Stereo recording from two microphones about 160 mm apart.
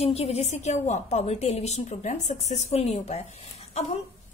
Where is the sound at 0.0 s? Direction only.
40° left (ahead or behind).